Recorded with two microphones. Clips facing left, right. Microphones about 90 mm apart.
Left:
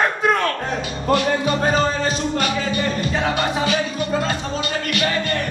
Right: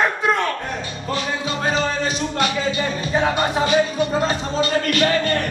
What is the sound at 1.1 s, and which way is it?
Music, 45° left (ahead or behind).